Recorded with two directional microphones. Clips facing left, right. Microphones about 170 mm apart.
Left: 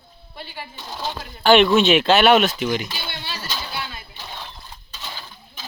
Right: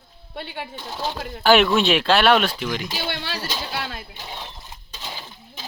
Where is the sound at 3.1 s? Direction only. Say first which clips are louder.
Right 4 dB; 90° right.